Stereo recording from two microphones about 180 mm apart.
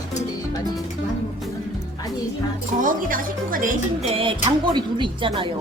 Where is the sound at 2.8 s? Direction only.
50° right (ahead or behind).